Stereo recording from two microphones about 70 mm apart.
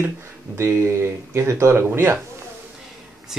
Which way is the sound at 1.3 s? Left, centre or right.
Right.